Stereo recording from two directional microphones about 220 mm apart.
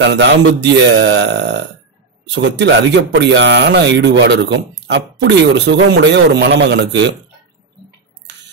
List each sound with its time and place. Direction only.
0.0 s speech: 50° right (ahead or behind)